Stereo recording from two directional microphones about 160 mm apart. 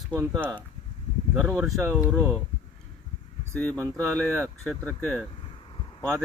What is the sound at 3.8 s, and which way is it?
Speech, 15° right (ahead or behind).